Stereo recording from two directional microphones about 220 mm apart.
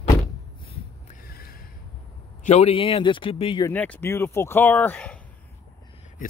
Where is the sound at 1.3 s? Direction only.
45° left (ahead or behind).